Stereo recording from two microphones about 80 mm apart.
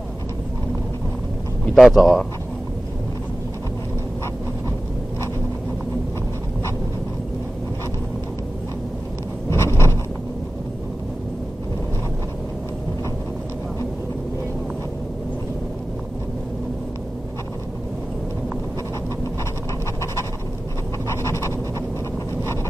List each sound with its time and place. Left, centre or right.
1.8 s speech: centre
9.5 s zipper: left
21.1 s a sound: left